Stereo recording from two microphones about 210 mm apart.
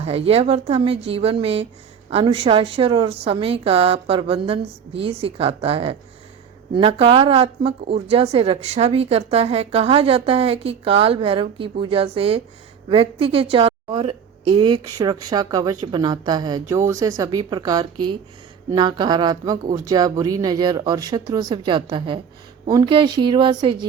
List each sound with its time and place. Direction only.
0.0 s a woman's voice: 30° right (ahead or behind)